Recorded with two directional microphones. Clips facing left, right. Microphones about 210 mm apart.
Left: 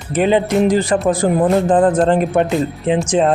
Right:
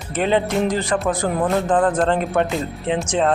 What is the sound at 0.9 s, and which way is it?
Speech, 20° left (ahead or behind).